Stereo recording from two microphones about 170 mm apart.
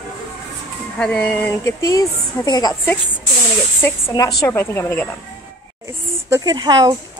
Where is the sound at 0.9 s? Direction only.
5° left (ahead or behind); by 2.9 s 25° left (ahead or behind).